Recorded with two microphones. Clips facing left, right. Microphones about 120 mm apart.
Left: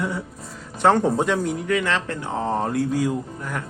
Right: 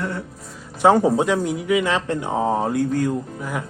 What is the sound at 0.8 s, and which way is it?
Speech, 10° right (ahead or behind).